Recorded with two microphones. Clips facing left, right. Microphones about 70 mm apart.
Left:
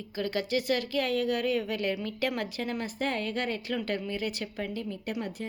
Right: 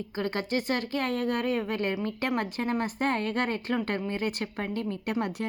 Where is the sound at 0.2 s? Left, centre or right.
Right.